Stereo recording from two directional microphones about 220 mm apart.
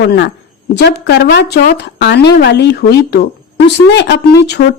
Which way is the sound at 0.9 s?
50° left (ahead or behind).